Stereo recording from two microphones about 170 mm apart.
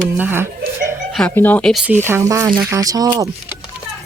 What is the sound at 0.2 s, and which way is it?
Speech, 10° right (ahead or behind).